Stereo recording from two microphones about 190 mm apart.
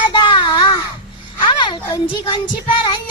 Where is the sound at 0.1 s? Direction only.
25° left (ahead or behind).